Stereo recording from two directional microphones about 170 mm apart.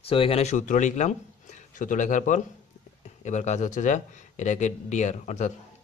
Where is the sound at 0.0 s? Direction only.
35° left (ahead or behind).